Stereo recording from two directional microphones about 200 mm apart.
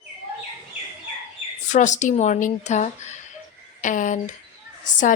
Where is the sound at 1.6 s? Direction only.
35° left (ahead or behind).